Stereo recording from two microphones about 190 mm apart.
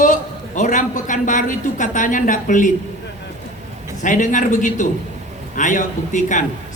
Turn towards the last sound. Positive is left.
turn(degrees=40)  # may be behind; listen again after turning